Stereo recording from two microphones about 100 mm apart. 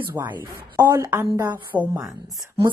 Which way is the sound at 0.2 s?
35° right (ahead or behind).